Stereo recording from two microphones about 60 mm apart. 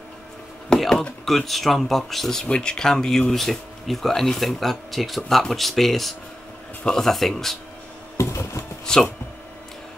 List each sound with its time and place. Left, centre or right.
0.7 s speech: centre
8.2 s a sound: left
8.8 s speech: centre